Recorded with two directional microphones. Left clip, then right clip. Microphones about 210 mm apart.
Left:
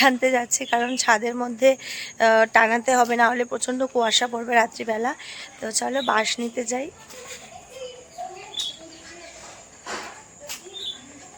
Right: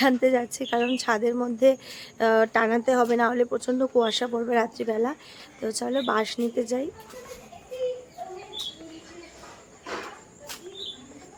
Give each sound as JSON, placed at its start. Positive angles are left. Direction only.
{"t": 0.0, "sound": "speech", "side_deg": -5}